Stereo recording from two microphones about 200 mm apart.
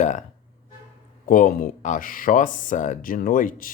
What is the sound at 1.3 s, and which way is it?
Speech, 45° left (ahead or behind).